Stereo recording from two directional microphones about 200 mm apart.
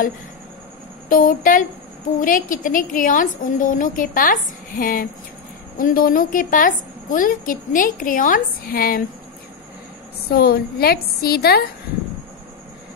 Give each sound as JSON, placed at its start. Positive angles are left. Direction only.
{"t": 1.0, "sound": "a woman's voice", "side_deg": 40}
{"t": 10.3, "sound": "a woman's voice", "side_deg": 50}